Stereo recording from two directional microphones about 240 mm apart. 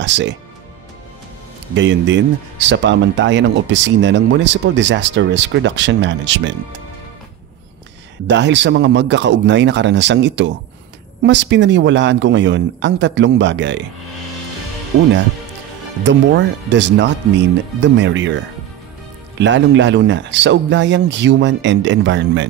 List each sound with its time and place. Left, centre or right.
0.0 s speech: right
1.8 s speech: right
8.3 s speech: right
16.0 s speech: right